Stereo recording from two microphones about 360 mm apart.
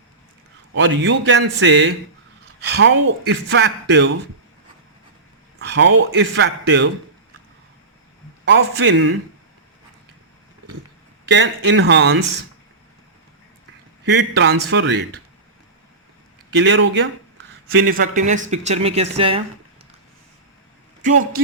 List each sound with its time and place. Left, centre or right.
0.8 s a man's voice: right
5.5 s speech: right
8.4 s a man's voice: right
11.3 s speech: right
14.0 s speech: right
16.6 s speech: right
17.8 s speech: right
21.0 s speech: right